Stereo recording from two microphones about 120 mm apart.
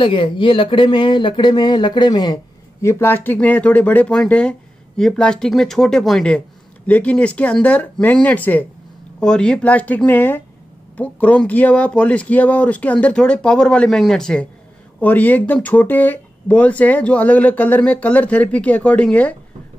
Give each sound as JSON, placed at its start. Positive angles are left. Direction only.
{"t": 0.0, "sound": "speech", "side_deg": 45}
{"t": 2.8, "sound": "speech", "side_deg": 20}